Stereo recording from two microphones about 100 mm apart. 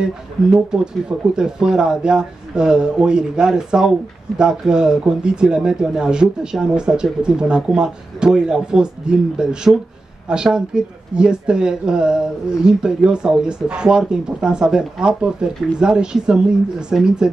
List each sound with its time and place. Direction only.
0.0 s speech: 5° right (ahead or behind)